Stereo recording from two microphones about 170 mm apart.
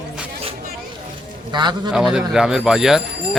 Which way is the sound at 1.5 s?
25° right (ahead or behind).